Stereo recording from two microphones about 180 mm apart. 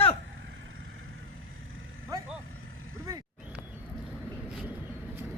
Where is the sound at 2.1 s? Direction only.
20° right (ahead or behind).